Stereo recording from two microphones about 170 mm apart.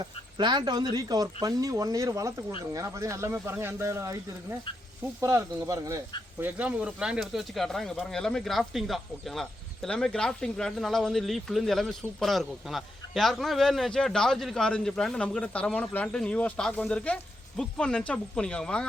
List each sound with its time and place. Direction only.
0.0 s speech: 25° right (ahead or behind)
6.4 s speech: 10° right (ahead or behind)